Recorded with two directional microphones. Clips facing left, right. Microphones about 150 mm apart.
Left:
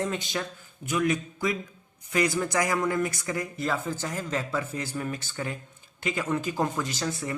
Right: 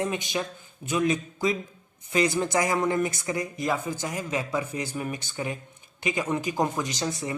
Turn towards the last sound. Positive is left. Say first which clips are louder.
# right 1 dB
turn(degrees=-20)  # may be behind; listen again after turning